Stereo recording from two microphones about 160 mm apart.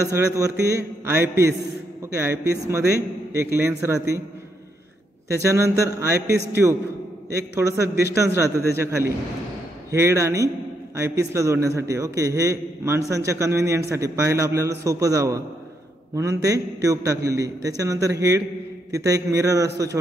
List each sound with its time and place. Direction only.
0.0 s a man's voice: 20° right (ahead or behind)
5.3 s a man's voice: 20° right (ahead or behind)